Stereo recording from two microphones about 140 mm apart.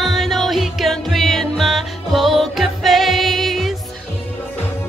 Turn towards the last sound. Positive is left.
turn(degrees=0)  # may be behind; listen again after turning